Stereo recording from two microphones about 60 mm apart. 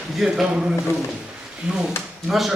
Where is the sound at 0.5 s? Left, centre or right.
Centre.